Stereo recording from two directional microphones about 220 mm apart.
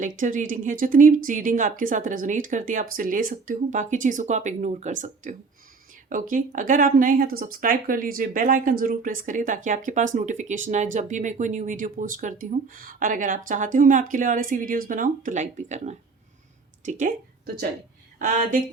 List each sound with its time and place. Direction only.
0.2 s speech: 35° right (ahead or behind)